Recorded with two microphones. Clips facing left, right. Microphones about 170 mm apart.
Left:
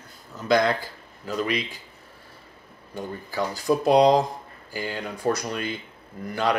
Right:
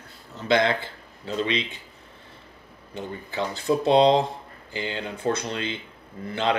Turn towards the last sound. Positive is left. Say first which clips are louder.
# left 1 dB
turn(degrees=-25)  # may be behind; listen again after turning